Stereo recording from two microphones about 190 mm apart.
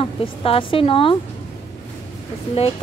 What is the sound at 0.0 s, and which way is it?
A woman's voice, 30° left (ahead or behind).